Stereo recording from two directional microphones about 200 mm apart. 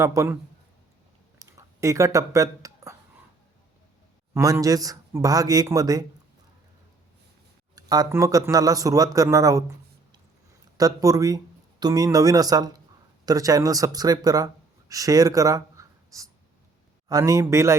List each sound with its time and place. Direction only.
0.0 s speech: 15° right (ahead or behind)
1.4 s a sound: 15° right (ahead or behind)
4.4 s speech: 15° right (ahead or behind)
7.8 s speech: 20° right (ahead or behind)